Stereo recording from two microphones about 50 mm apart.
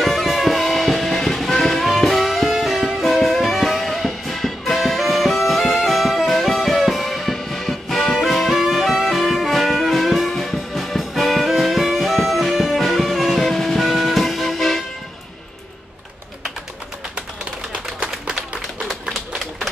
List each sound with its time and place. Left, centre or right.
0.0 s music: centre
17.7 s a sound: right
18.9 s typewriter: centre